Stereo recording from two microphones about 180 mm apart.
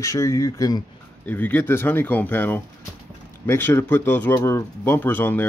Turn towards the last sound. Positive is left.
turn(degrees=10)  # may be behind; listen again after turning